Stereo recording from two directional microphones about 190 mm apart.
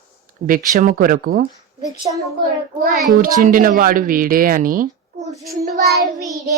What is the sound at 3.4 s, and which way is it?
Speech, 45° right (ahead or behind).